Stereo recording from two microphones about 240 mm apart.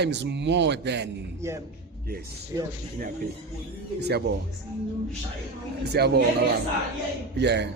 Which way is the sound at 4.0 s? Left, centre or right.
Right.